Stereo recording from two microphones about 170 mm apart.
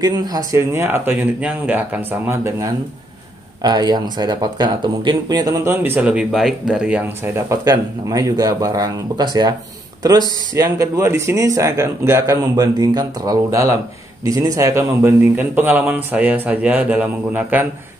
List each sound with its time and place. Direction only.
0.0 s a man's voice: 25° right (ahead or behind); by 7.4 s 5° right (ahead or behind)
7.4 s a man's voice: 20° right (ahead or behind)